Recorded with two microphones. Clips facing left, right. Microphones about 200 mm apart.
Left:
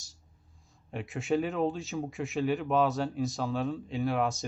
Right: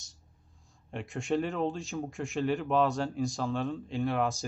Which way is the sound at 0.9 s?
Centre (ahead or behind).